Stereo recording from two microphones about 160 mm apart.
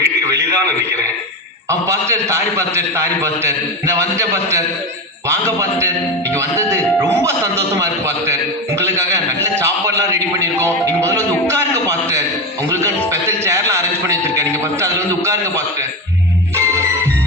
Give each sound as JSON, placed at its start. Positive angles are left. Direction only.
{"t": 0.0, "sound": "radio", "side_deg": -20}
{"t": 1.9, "sound": "speech", "side_deg": -20}
{"t": 7.8, "sound": "speech", "side_deg": -20}
{"t": 9.6, "sound": "speech", "side_deg": -20}